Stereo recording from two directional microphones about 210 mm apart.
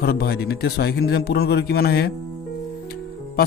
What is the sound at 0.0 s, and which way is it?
A man's voice, 50° left (ahead or behind).